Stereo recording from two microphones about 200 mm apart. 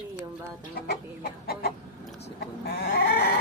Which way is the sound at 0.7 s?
55° left (ahead or behind).